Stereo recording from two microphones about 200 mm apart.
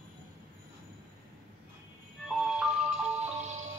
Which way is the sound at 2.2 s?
Centre (ahead or behind).